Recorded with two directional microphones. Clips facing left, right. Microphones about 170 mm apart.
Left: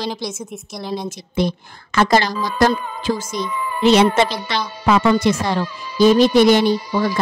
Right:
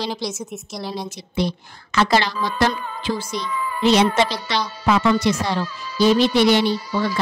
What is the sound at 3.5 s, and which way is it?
Speech, 25° left (ahead or behind).